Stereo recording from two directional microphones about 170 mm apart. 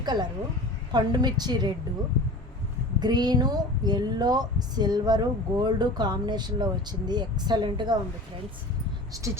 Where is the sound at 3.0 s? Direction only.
25° right (ahead or behind).